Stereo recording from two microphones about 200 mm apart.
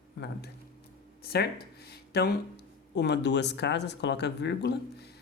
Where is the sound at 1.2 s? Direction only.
50° left (ahead or behind).